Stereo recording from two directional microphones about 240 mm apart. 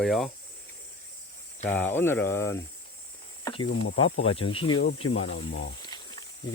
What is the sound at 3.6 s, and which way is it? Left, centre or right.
Speech, left.